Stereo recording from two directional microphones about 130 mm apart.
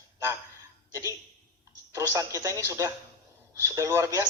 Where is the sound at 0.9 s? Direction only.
25° right (ahead or behind).